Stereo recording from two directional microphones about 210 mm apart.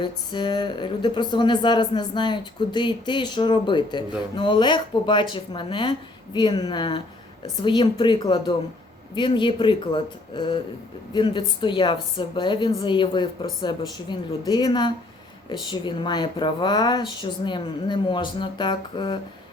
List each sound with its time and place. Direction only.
0.0 s speech: 20° left (ahead or behind)